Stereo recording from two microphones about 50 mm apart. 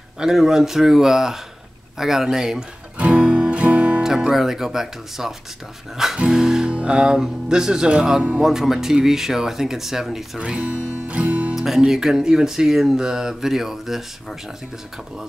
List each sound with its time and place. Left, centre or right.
0.2 s speech: centre
3.0 s music: right
4.0 s speech: centre
10.4 s music: centre
11.5 s speech: centre